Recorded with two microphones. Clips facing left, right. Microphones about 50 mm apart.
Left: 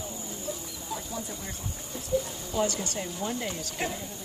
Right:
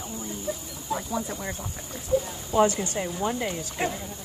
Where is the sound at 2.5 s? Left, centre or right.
Right.